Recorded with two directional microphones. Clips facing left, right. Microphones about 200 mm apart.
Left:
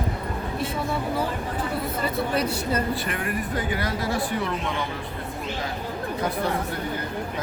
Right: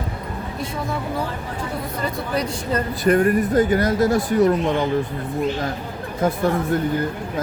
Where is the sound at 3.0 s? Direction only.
40° right (ahead or behind).